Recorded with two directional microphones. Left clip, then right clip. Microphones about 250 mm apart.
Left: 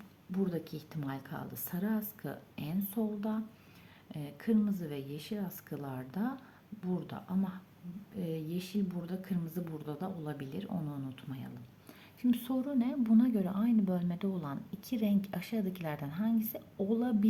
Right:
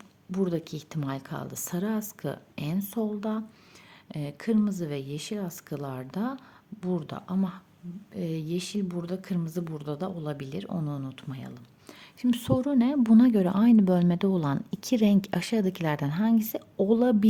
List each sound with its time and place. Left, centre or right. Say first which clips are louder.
0.3 s a woman's voice: right 7 dB; right